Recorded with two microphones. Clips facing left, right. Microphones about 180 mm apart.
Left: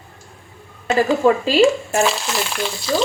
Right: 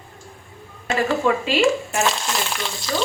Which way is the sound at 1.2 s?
35° left (ahead or behind).